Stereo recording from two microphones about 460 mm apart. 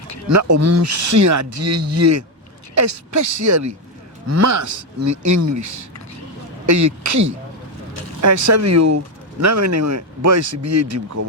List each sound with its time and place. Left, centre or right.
0.3 s speech: right
6.7 s speech: right